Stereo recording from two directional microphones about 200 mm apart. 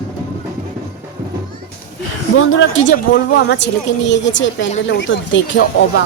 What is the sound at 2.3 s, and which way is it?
A woman's voice, 85° left.